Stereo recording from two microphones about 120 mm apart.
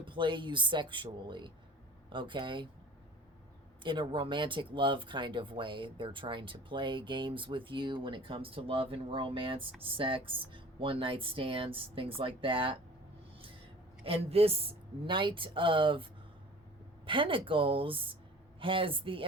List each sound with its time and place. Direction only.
0.0 s speech: 45° right (ahead or behind)
3.8 s speech: 40° right (ahead or behind)
14.0 s speech: 55° right (ahead or behind)
17.1 s speech: 45° right (ahead or behind)